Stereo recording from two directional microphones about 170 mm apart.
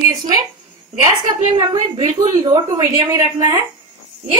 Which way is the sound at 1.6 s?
25° right (ahead or behind).